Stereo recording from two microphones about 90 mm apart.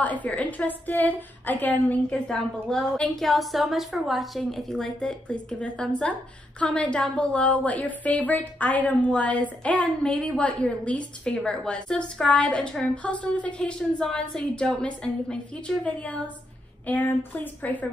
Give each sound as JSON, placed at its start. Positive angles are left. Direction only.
{"t": 0.0, "sound": "a woman's voice", "side_deg": 15}
{"t": 2.2, "sound": "a woman's voice", "side_deg": 5}